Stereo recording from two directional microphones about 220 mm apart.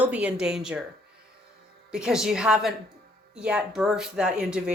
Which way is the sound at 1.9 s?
5° right (ahead or behind).